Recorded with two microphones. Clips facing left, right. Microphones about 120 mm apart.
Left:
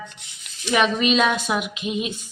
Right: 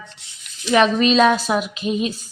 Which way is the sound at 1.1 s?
30° right (ahead or behind).